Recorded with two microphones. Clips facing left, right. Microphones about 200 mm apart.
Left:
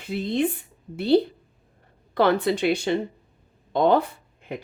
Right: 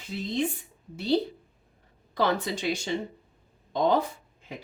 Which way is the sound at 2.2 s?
60° left (ahead or behind).